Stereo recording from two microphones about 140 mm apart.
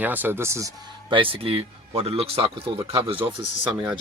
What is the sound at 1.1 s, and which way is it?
Speech, 35° right (ahead or behind).